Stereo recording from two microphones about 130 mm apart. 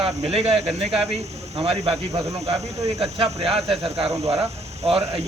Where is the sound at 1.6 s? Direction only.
50° right (ahead or behind).